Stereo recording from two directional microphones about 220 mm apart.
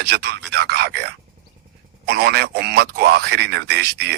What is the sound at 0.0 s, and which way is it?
Speech, 50° right (ahead or behind).